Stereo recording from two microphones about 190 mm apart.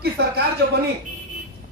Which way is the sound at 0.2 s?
60° right (ahead or behind).